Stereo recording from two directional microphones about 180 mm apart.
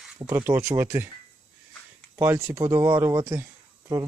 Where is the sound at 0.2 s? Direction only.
20° right (ahead or behind).